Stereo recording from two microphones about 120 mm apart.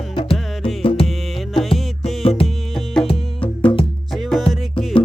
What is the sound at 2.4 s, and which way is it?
Music, centre (ahead or behind).